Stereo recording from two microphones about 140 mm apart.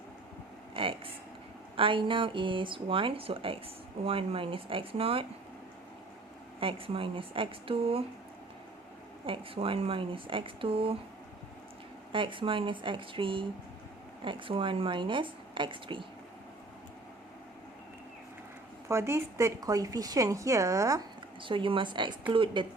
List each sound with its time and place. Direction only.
0.7 s speech: 40° right (ahead or behind)
6.6 s speech: 40° right (ahead or behind)
9.2 s speech: 40° right (ahead or behind)
12.1 s speech: 35° right (ahead or behind)
18.9 s speech: 20° right (ahead or behind)
21.4 s speech: 40° right (ahead or behind)